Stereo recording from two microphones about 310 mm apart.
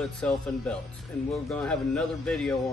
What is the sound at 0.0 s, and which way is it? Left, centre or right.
Speech, centre.